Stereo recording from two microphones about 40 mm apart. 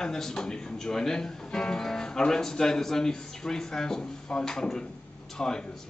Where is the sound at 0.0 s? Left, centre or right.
Centre.